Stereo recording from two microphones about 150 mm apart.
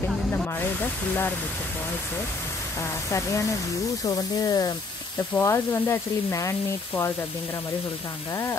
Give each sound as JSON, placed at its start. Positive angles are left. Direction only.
{"t": 3.1, "sound": "speech", "side_deg": 20}
{"t": 5.3, "sound": "sizzle", "side_deg": 15}